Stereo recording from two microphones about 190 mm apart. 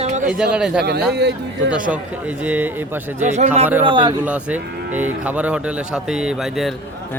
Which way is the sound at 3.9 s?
25° right (ahead or behind).